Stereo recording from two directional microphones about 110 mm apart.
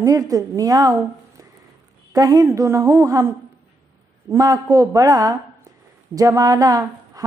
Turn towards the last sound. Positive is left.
turn(degrees=-35)  # may be behind; listen again after turning